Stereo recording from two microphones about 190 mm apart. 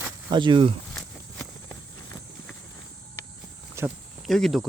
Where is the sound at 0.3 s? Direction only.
25° right (ahead or behind).